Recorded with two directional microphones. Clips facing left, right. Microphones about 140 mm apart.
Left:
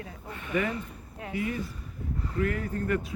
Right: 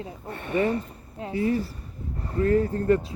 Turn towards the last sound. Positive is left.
turn(degrees=-30)  # may be behind; listen again after turning